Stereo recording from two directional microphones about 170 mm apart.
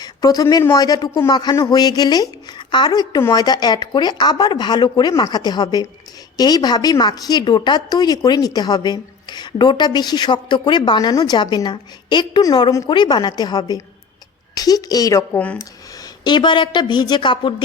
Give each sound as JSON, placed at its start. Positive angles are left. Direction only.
{"t": 0.0, "sound": "a woman's voice", "side_deg": 20}